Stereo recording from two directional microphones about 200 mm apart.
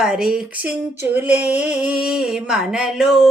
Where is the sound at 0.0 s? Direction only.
5° right (ahead or behind).